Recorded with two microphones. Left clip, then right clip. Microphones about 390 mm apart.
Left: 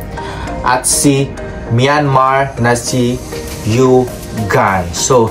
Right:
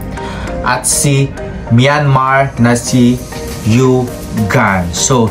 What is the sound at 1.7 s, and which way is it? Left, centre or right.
Speech, centre.